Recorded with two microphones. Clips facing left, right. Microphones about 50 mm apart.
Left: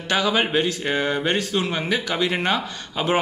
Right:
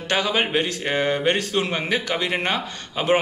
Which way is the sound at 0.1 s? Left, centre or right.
Right.